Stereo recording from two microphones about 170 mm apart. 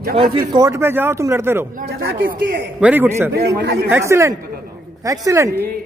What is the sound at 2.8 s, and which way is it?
Speech, 10° right (ahead or behind).